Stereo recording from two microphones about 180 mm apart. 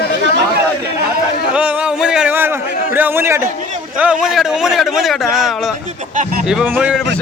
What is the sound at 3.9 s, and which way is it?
A man's voice, 5° right (ahead or behind).